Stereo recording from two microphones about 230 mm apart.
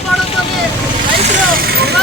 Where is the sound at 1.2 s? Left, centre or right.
Right.